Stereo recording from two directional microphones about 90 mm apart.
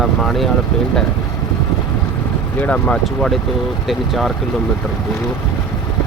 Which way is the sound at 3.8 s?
Centre (ahead or behind).